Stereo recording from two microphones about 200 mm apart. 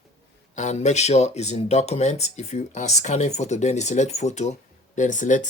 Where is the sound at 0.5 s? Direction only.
35° left (ahead or behind).